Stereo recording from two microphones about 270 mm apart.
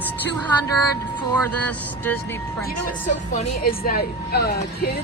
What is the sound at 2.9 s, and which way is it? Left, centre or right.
Speech, left.